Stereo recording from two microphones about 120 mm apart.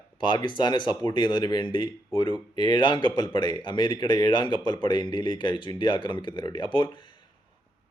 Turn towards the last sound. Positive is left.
turn(degrees=40)  # may be behind; listen again after turning